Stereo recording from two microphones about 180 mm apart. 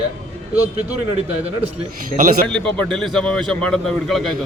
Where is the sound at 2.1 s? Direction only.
50° right (ahead or behind).